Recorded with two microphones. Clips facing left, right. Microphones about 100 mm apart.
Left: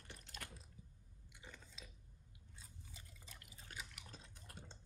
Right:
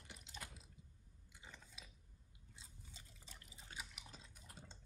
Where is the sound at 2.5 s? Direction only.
20° right (ahead or behind).